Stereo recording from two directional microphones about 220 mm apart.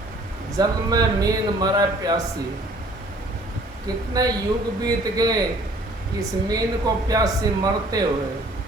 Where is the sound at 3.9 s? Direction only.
20° right (ahead or behind).